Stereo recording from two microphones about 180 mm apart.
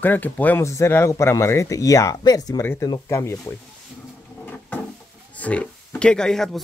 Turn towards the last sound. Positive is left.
turn(degrees=0)  # may be behind; listen again after turning